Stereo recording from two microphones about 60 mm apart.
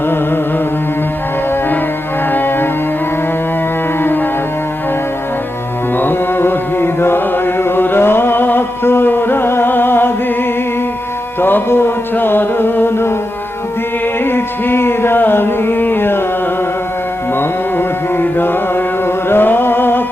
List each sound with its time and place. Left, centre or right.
2.3 s music: left
6.0 s mantra: left
11.3 s music: left
14.3 s music: left
17.7 s music: left